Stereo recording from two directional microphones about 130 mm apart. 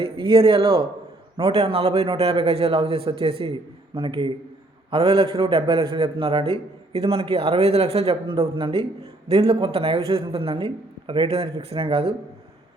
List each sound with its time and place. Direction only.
0.0 s a man's voice: 45° right (ahead or behind)